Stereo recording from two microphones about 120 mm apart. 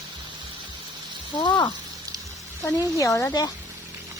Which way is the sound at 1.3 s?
40° left (ahead or behind).